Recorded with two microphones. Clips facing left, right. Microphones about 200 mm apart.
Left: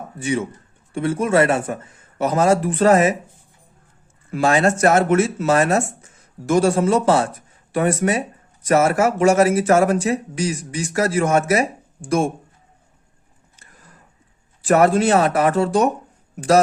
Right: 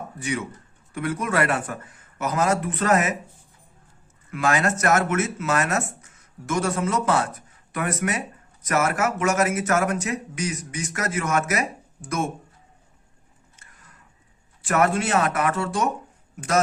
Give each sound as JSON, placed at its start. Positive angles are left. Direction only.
{"t": 0.2, "sound": "a man's voice", "side_deg": 25}
{"t": 4.3, "sound": "speech", "side_deg": 30}
{"t": 13.6, "sound": "a sound", "side_deg": 35}
{"t": 14.6, "sound": "speech", "side_deg": 35}